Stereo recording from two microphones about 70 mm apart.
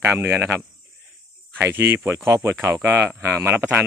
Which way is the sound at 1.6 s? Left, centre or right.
Right.